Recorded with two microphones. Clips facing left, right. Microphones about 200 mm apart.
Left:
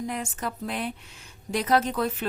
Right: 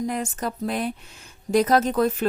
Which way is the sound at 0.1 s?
40° right (ahead or behind).